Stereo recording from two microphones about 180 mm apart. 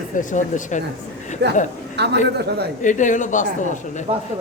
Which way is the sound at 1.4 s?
65° right (ahead or behind).